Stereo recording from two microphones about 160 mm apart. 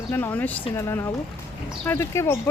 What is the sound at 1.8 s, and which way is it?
Speech, 15° left (ahead or behind).